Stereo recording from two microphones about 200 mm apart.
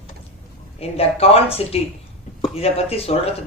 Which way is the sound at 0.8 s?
30° left (ahead or behind).